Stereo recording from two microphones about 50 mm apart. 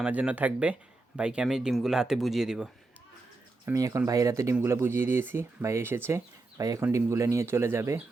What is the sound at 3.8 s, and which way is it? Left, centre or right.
Speech, right.